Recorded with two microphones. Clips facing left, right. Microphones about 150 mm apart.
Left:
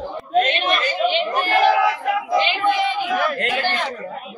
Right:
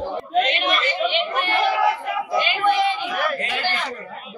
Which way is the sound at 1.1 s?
35° left (ahead or behind).